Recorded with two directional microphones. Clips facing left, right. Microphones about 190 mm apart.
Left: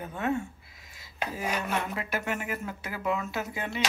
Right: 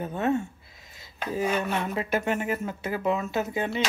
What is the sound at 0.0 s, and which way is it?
Speech, 30° right (ahead or behind).